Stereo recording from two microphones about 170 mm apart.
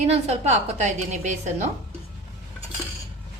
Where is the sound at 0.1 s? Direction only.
40° right (ahead or behind).